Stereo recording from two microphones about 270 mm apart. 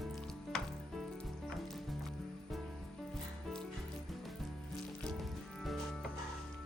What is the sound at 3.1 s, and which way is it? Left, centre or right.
Music, centre.